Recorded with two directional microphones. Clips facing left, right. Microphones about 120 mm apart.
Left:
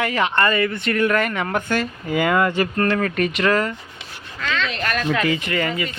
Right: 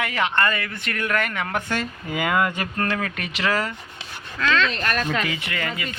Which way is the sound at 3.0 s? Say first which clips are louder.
Left 9 dB; 40° left (ahead or behind).